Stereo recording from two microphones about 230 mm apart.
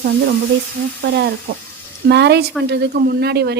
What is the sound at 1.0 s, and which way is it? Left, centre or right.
Speech, right.